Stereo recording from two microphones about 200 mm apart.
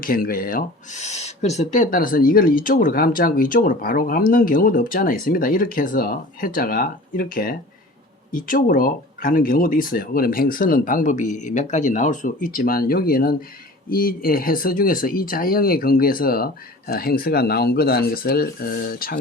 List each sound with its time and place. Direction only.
0.0 s speech: 45° left (ahead or behind)